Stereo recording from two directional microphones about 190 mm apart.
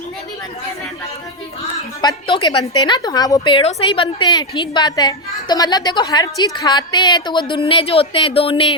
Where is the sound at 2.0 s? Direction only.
25° left (ahead or behind).